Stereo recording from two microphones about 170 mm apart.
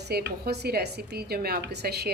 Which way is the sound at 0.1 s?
65° right (ahead or behind).